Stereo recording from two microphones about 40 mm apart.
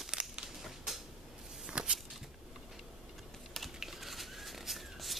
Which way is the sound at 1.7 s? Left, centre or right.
Right.